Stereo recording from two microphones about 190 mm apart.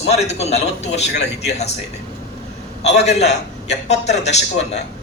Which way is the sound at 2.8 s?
35° left (ahead or behind).